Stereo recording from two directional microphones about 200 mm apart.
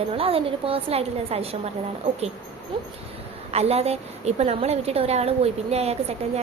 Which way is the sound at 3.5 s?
30° right (ahead or behind).